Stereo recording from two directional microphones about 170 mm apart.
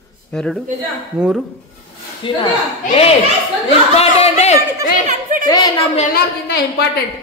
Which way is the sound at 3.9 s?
35° left (ahead or behind).